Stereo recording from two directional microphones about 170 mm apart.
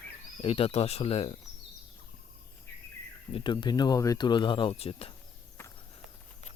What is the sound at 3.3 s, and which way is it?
Speech, 25° left (ahead or behind).